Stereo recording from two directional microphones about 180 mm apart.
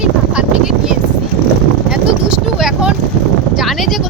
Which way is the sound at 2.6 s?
5° right (ahead or behind).